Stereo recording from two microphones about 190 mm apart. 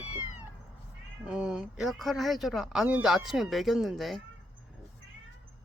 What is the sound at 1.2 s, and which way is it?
Speech, 5° right (ahead or behind).